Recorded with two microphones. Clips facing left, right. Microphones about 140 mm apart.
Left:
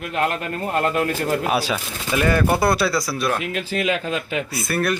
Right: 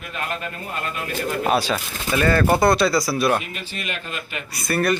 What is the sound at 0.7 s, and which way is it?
Speech, 70° left (ahead or behind).